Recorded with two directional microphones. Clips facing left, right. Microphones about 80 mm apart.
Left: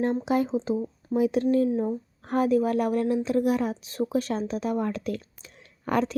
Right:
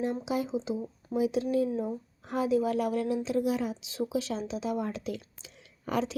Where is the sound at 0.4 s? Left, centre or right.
Left.